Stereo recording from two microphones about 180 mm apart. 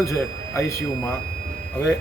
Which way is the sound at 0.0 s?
15° left (ahead or behind).